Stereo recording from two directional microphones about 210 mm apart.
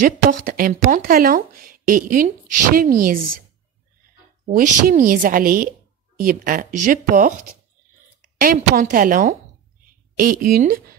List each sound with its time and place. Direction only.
0.0 s speech: 40° right (ahead or behind)
4.5 s a woman's voice: 45° right (ahead or behind)
8.4 s a woman's voice: 45° right (ahead or behind)